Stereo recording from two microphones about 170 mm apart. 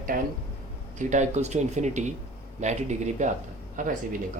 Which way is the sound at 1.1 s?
45° right (ahead or behind).